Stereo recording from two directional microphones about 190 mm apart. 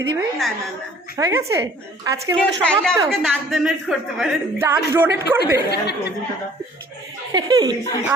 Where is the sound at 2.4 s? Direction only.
5° left (ahead or behind).